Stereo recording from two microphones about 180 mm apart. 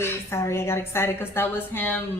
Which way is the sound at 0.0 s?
15° left (ahead or behind).